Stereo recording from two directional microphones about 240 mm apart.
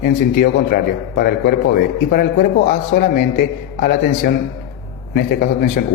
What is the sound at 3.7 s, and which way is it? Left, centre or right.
A man's voice, left.